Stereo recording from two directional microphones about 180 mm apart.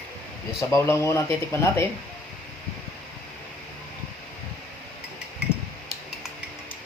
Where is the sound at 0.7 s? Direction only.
15° left (ahead or behind).